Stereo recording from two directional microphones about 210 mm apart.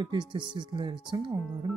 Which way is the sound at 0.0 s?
20° right (ahead or behind).